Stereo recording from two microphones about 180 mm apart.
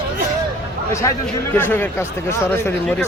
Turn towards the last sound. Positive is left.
turn(degrees=15)  # may be behind; listen again after turning